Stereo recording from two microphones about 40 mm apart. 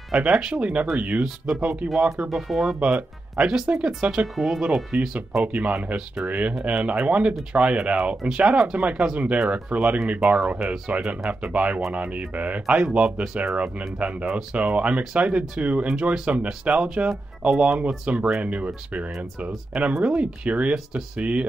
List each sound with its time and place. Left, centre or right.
0.1 s speech: centre
0.6 s speech: right
1.2 s speech: centre
1.6 s speech: right
2.2 s speech: centre
2.8 s speech: right
4.4 s speech: centre
5.4 s speech: right
10.6 s speech: right